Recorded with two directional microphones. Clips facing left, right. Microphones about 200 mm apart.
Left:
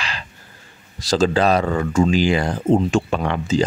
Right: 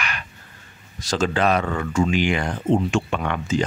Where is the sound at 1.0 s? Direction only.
35° left (ahead or behind).